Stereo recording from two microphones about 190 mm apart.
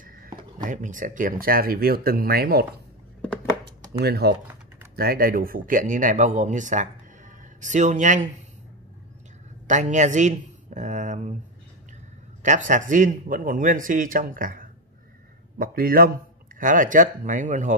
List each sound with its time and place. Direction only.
0.0 s a sound: 45° right (ahead or behind)
0.6 s a man's voice: 40° right (ahead or behind)
4.0 s a man's voice: 55° right (ahead or behind); by 8.3 s 40° right (ahead or behind)
9.7 s speech: 40° right (ahead or behind)
12.4 s a man's voice: 40° right (ahead or behind)